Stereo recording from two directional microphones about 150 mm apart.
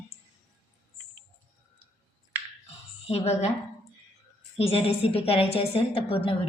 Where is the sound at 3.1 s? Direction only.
45° left (ahead or behind).